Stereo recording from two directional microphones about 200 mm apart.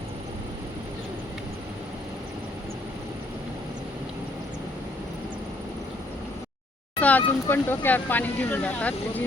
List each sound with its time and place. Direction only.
7.0 s speech: 10° left (ahead or behind)